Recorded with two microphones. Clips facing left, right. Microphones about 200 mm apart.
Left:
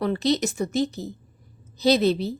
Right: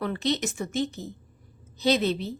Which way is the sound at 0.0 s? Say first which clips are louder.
Left 5 dB; 35° left (ahead or behind).